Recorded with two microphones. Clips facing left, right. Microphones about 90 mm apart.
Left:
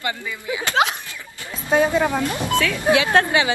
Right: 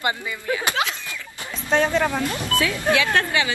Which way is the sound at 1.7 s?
10° left (ahead or behind).